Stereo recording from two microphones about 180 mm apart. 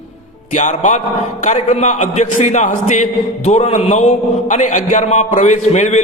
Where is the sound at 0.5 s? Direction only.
45° left (ahead or behind).